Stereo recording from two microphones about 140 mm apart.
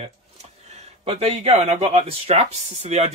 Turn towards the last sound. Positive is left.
turn(degrees=-50)  # may be behind; listen again after turning